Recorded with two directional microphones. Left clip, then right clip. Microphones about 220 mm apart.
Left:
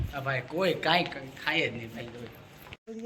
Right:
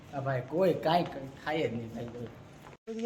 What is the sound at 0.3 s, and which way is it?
Speech, 25° right (ahead or behind).